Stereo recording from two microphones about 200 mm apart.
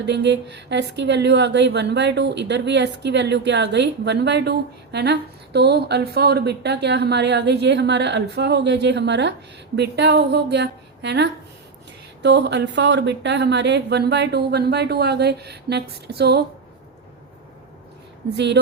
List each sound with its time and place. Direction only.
0.0 s a woman's voice: 60° right (ahead or behind)
18.3 s a woman's voice: 60° right (ahead or behind)